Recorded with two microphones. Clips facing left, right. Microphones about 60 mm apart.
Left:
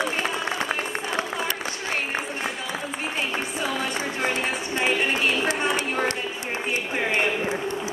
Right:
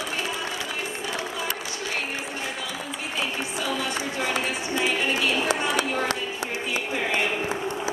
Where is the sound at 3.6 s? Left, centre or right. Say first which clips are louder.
Even; left.